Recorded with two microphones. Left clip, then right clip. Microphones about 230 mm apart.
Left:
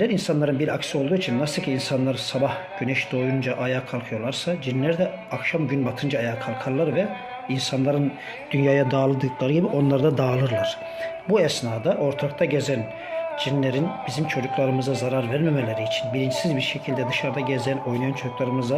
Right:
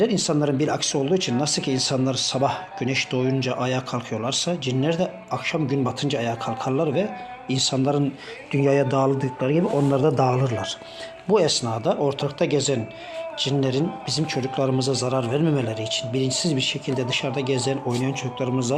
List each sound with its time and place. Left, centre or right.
0.0 s speech: centre
8.5 s speech: centre
10.0 s speech: centre
11.3 s speech: centre